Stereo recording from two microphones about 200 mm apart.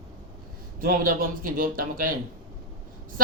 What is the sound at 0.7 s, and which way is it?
Speech, 45° right (ahead or behind).